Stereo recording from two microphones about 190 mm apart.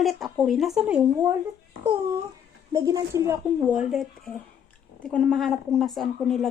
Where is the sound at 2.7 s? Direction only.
20° right (ahead or behind).